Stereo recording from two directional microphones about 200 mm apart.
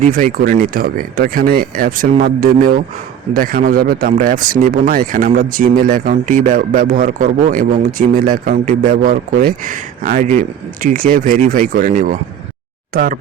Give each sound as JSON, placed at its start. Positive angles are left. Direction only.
{"t": 0.1, "sound": "speech", "side_deg": -40}